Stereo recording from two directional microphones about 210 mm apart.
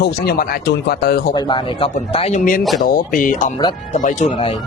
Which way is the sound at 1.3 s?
20° left (ahead or behind).